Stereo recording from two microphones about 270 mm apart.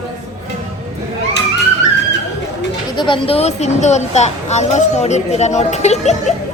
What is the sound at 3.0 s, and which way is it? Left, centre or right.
Speech, centre.